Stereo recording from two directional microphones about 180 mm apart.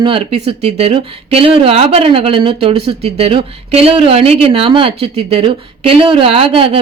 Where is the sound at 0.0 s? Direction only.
30° right (ahead or behind).